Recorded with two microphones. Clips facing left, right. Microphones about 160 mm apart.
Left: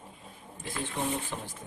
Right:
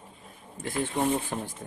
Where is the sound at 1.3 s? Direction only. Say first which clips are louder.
Right 5 dB; 45° right (ahead or behind).